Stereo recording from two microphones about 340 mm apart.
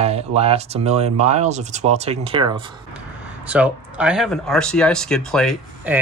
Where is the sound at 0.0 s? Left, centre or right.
Centre.